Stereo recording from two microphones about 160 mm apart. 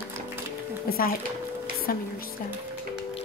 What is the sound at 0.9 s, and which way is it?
Speech, 65° left (ahead or behind).